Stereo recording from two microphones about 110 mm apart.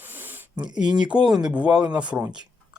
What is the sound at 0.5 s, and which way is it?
Speech, 40° right (ahead or behind).